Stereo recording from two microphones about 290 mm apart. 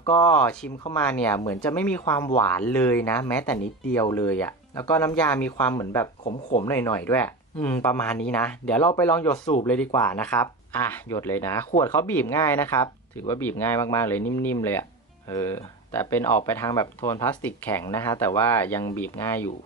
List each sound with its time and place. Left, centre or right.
0.0 s speech: centre
6.2 s speech: left
6.7 s speech: centre